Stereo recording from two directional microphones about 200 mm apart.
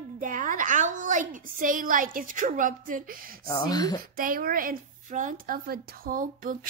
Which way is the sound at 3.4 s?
20° left (ahead or behind).